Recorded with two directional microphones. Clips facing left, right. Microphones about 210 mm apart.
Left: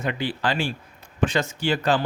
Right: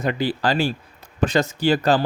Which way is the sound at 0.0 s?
40° right (ahead or behind).